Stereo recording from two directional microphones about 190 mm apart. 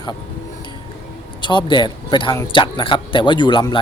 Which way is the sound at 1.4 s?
25° left (ahead or behind).